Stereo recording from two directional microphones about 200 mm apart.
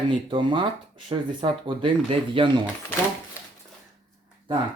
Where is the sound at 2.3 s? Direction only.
25° right (ahead or behind).